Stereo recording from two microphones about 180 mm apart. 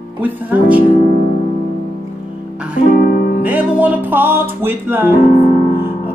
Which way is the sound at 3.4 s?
10° right (ahead or behind).